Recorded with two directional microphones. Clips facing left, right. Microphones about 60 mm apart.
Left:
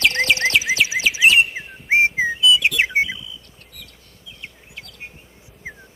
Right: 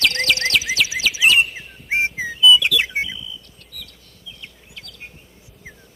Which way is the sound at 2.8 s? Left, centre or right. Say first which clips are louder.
Left 4 dB; left.